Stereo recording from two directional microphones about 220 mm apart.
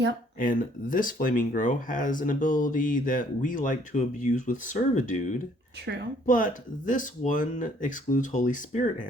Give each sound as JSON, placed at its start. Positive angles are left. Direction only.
{"t": 0.3, "sound": "speech", "side_deg": 40}
{"t": 5.8, "sound": "a woman's voice", "side_deg": -50}
{"t": 6.2, "sound": "speech", "side_deg": 35}